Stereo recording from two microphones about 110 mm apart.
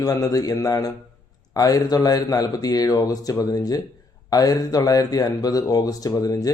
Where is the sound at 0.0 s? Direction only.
35° left (ahead or behind).